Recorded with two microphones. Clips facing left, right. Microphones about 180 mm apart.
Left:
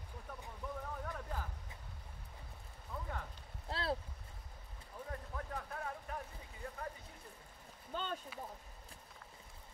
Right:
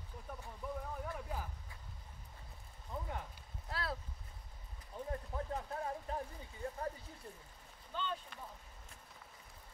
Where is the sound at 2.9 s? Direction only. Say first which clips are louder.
Right 1 dB; 20° right (ahead or behind).